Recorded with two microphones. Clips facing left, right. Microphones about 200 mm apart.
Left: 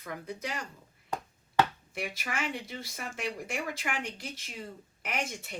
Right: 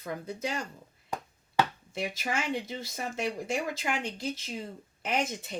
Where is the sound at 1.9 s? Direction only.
25° right (ahead or behind).